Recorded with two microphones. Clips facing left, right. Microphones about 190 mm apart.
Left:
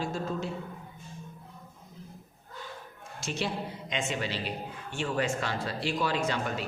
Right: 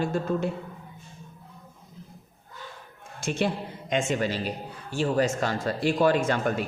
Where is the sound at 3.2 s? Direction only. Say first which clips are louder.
Right 6 dB; 55° right (ahead or behind).